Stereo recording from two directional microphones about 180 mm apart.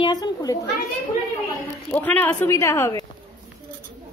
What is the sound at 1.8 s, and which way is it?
A woman's voice, 10° left (ahead or behind).